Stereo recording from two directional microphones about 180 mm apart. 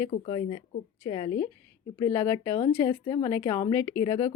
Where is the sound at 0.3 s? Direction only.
30° left (ahead or behind).